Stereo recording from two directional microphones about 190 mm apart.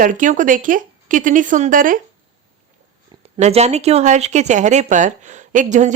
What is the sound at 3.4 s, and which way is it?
A woman's voice, 35° right (ahead or behind).